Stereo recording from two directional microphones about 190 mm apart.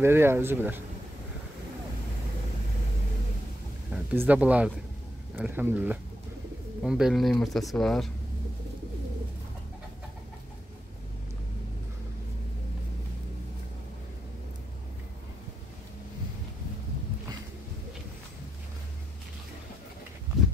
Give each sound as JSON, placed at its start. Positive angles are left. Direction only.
{"t": 0.0, "sound": "speech", "side_deg": -15}
{"t": 3.9, "sound": "speech", "side_deg": -10}